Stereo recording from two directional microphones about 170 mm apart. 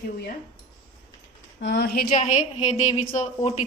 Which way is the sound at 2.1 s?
45° left (ahead or behind).